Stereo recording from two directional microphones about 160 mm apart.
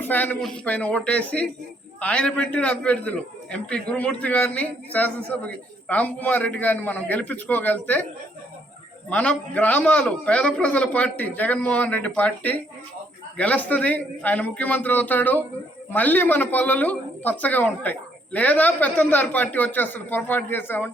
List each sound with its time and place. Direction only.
0.0 s a man's voice: 10° left (ahead or behind)
9.0 s a man's voice: 5° left (ahead or behind)